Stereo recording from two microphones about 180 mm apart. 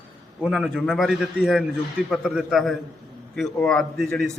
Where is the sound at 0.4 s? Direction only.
5° right (ahead or behind).